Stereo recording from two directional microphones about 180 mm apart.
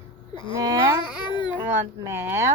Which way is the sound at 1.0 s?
25° left (ahead or behind).